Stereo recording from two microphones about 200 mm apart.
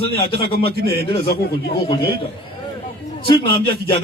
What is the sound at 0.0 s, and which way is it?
Speech, 25° left (ahead or behind).